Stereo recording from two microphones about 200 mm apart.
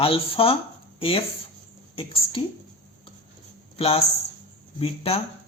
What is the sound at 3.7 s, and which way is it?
A man's voice, 30° left (ahead or behind).